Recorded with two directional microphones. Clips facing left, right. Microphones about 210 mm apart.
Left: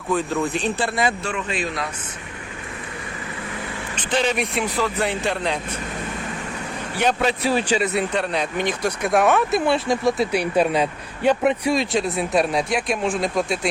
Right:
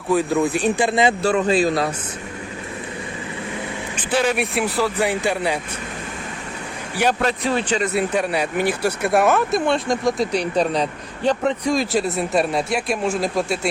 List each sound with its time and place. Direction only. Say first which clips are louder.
0.1 s speech: right 4 dB; 10° right (ahead or behind)
1.2 s a man's voice: right 9 dB; 35° right (ahead or behind)
3.9 s speech: right 2 dB; 5° right (ahead or behind)
6.9 s speech: right 1 dB; 10° right (ahead or behind)
7.2 s speech: even; 5° left (ahead or behind)
7.9 s speech: right 2 dB; 10° right (ahead or behind)